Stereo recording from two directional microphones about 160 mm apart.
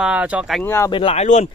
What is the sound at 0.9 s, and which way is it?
Speech, 35° left (ahead or behind).